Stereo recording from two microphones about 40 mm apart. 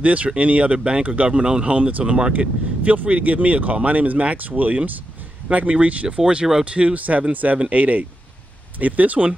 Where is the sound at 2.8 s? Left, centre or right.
Right.